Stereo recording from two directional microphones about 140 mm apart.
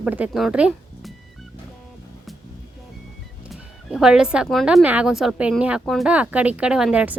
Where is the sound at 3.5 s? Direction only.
Centre (ahead or behind).